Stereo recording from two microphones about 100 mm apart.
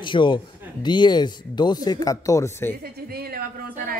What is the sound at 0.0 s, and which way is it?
Speech, 50° left (ahead or behind).